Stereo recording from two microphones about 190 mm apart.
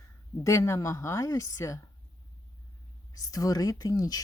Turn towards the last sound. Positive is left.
turn(degrees=20)  # may be behind; listen again after turning